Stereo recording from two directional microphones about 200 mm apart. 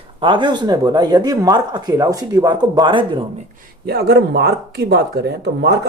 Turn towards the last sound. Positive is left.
turn(degrees=-55)  # may be behind; listen again after turning